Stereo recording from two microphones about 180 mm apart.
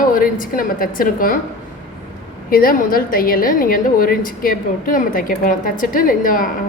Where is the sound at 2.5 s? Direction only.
50° left (ahead or behind).